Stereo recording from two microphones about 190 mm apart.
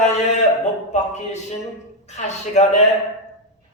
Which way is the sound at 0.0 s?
35° left (ahead or behind).